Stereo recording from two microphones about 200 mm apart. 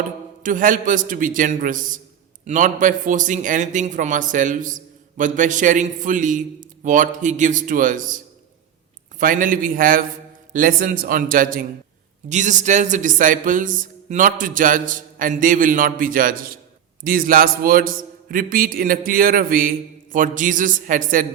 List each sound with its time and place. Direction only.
0.4 s a man's voice: 40° right (ahead or behind)